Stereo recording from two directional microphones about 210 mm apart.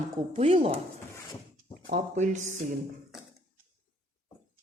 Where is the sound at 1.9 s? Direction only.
35° right (ahead or behind).